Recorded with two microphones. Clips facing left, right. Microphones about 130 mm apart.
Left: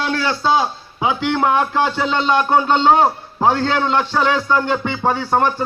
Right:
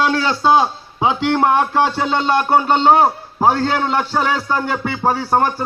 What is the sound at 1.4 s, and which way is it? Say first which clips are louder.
A man's voice: right 1 dB; 15° right (ahead or behind).